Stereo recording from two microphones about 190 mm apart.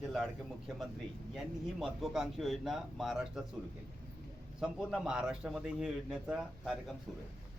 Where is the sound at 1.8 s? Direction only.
5° right (ahead or behind).